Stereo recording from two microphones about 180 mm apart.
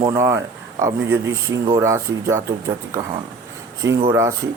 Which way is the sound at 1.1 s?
90° right.